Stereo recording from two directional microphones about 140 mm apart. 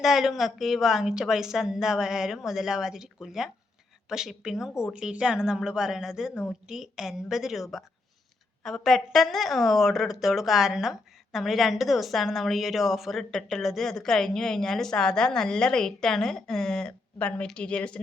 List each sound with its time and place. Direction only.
0.0 s a woman's voice: centre (ahead or behind)